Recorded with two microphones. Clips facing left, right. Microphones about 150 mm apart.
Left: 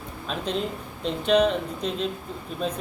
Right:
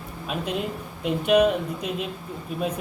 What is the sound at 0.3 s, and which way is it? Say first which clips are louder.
Speech: even; 10° right (ahead or behind).